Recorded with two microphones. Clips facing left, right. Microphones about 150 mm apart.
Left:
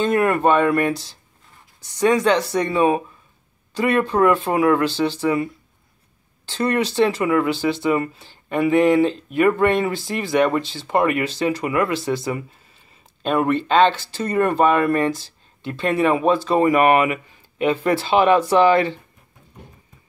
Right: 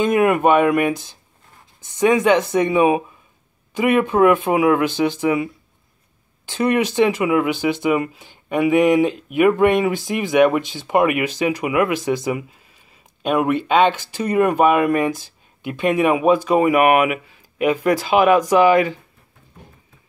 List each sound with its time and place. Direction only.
0.0 s speech: 15° right (ahead or behind)